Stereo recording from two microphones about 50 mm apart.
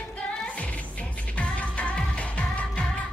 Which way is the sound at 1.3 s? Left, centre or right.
Left.